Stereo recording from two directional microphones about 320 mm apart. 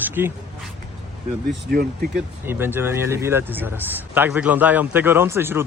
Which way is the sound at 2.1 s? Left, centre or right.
Centre.